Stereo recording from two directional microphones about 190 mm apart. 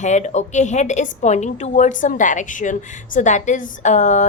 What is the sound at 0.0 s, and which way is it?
A woman's voice, 40° left (ahead or behind).